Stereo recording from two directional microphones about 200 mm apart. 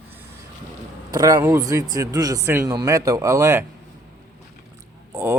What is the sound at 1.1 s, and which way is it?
A man's voice, 20° right (ahead or behind).